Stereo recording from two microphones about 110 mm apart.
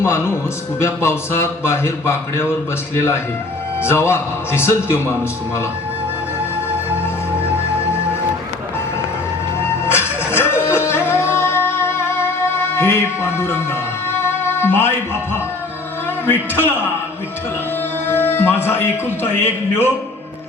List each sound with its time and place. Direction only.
0.0 s a man's voice: 25° left (ahead or behind)
9.8 s music: 20° left (ahead or behind)
12.8 s a man's voice: 20° left (ahead or behind)
14.2 s music: 20° left (ahead or behind)
16.2 s a man's voice: 20° left (ahead or behind)
18.0 s a man's voice: 20° left (ahead or behind)